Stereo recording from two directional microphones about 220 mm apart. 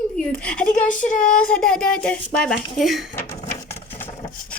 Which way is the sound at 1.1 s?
35° left (ahead or behind).